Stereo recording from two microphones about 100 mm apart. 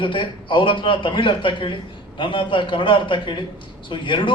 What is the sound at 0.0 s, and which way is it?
A man's voice, 55° left (ahead or behind).